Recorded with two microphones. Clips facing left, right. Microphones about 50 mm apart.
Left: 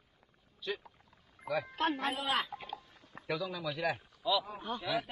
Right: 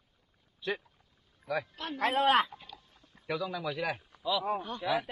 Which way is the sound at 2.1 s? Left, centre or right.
Right.